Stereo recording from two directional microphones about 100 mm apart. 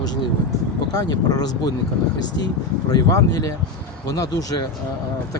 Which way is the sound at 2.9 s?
35° left (ahead or behind).